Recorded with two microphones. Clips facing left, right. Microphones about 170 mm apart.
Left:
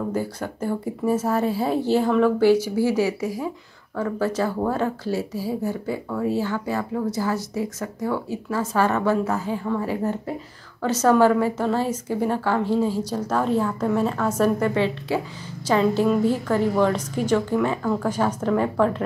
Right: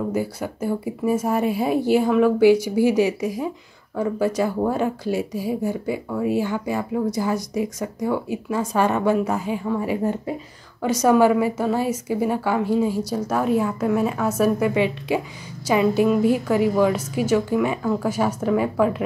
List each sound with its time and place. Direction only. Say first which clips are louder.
0.1 s speech: right 2 dB; 10° right (ahead or behind)